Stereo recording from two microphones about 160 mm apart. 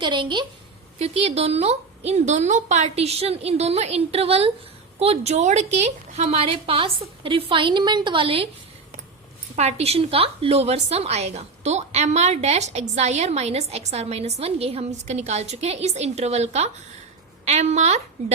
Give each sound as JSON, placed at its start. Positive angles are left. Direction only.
{"t": 0.0, "sound": "a woman's voice", "side_deg": -30}
{"t": 0.9, "sound": "a woman's voice", "side_deg": -40}
{"t": 9.6, "sound": "a woman's voice", "side_deg": -40}